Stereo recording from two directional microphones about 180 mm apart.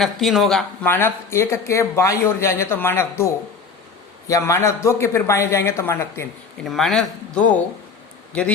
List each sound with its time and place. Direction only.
0.0 s speech: centre (ahead or behind)
0.9 s speech: 15° left (ahead or behind)
4.3 s speech: 15° left (ahead or behind)
6.7 s speech: centre (ahead or behind)